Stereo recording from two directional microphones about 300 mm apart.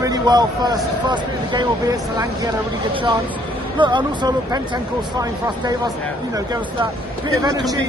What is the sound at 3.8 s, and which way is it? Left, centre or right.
Speech, centre.